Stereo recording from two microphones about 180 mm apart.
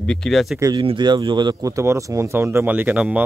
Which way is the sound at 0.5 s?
20° right (ahead or behind).